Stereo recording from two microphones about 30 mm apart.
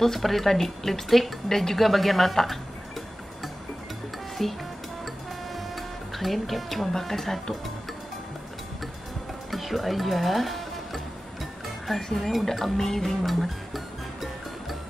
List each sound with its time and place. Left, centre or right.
0.0 s speech: centre
4.4 s speech: centre
5.8 s music: centre
6.9 s speech: centre
9.5 s music: centre
11.9 s speech: centre
12.7 s music: centre